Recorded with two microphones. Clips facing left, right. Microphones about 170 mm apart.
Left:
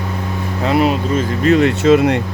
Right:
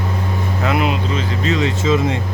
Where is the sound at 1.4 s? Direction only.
60° left (ahead or behind).